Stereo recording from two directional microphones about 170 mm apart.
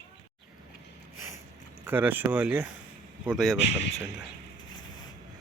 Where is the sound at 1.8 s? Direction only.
10° right (ahead or behind).